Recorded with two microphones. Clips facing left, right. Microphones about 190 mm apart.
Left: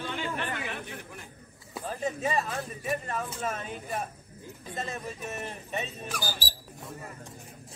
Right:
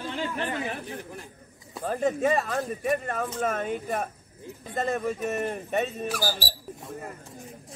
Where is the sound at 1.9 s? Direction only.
50° right (ahead or behind).